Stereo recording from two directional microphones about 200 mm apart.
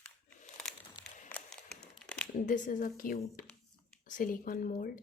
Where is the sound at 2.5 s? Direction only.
40° left (ahead or behind).